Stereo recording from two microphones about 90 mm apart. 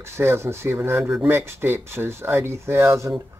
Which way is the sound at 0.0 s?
30° right (ahead or behind).